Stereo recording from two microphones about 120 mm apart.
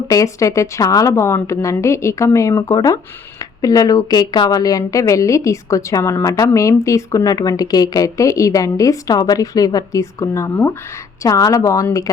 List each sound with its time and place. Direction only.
0.1 s a woman's voice: 25° left (ahead or behind)